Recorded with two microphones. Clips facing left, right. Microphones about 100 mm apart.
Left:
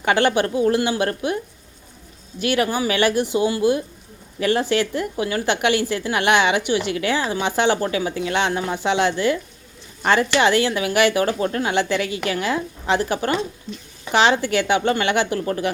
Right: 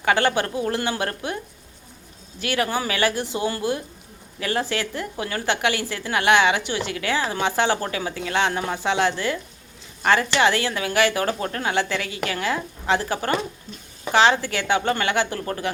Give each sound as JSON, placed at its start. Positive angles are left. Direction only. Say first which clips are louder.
{"t": 0.0, "sound": "a woman's voice", "louder": "left 2 dB", "side_deg": 25}
{"t": 2.4, "sound": "a woman's voice", "louder": "left 4 dB", "side_deg": 20}
{"t": 10.4, "sound": "a woman's voice", "louder": "left 3 dB", "side_deg": 20}